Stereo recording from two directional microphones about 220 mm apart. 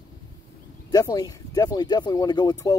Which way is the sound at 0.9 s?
15° left (ahead or behind).